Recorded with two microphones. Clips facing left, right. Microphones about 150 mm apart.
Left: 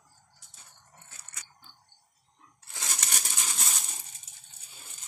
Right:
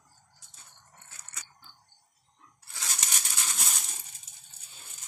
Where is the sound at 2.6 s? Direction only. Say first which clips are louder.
Left 1 dB; 15° left (ahead or behind).